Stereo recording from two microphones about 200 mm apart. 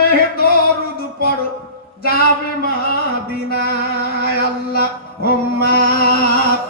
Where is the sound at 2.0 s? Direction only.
50° left (ahead or behind).